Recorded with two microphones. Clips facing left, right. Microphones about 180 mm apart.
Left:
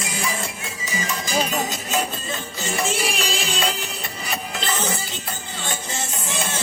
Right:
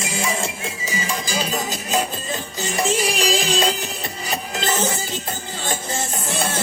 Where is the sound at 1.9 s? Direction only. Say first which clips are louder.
Right 2 dB; 35° right (ahead or behind).